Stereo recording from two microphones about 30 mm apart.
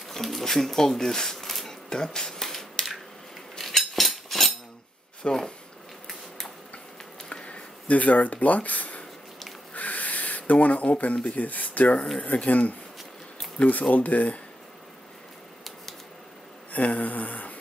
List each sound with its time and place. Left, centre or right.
0.1 s speech: centre
1.7 s a sound: left
2.1 s speech: left
2.4 s scissors: centre
3.5 s cutlery: centre
4.1 s a sound: centre
5.2 s speech: left
7.9 s speech: left
9.8 s a sound: left
11.2 s speech: left
13.6 s speech: left
13.9 s speech: left
16.7 s speech: left